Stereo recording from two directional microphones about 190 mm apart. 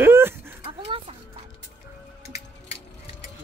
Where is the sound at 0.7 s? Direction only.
30° right (ahead or behind).